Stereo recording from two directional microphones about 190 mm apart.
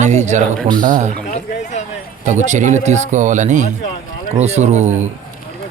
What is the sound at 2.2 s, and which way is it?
Speech, 40° right (ahead or behind).